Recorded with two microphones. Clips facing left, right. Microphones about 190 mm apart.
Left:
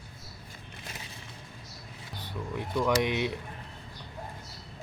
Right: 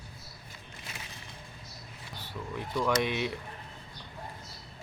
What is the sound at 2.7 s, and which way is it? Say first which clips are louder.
Speech: left 2 dB; 10° left (ahead or behind).